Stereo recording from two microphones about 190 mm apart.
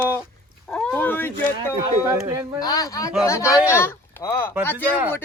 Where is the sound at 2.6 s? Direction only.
20° left (ahead or behind).